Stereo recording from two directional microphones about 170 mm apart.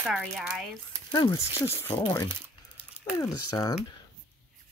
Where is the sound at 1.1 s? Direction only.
25° left (ahead or behind).